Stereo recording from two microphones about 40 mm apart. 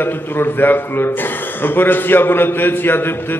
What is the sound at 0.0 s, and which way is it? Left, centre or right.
A man's voice, left.